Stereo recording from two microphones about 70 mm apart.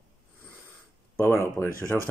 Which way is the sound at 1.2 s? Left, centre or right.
Left.